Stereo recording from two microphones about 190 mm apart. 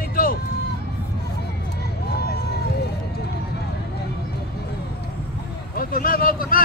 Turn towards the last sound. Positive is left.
turn(degrees=50)  # may be behind; listen again after turning